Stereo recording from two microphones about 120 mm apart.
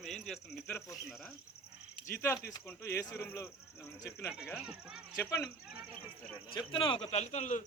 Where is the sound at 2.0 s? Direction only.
20° left (ahead or behind).